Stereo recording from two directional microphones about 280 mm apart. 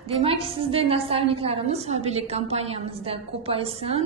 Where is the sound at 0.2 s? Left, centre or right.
Centre.